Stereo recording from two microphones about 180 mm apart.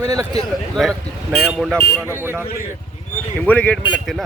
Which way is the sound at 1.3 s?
Centre (ahead or behind).